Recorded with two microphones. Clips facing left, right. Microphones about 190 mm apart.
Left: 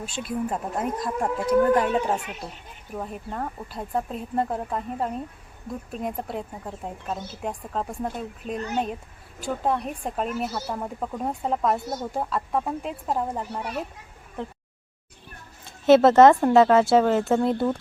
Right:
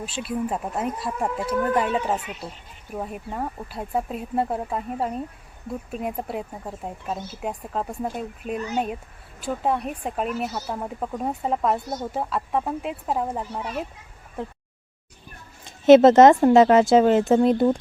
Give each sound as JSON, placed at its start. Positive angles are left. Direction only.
{"t": 0.0, "sound": "a woman's voice", "side_deg": -5}
{"t": 15.6, "sound": "speech", "side_deg": -20}